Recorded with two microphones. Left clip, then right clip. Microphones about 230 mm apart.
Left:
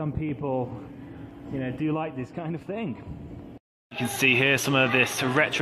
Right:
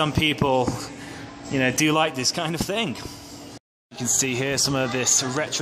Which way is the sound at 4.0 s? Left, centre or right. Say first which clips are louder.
Left 3 dB; centre.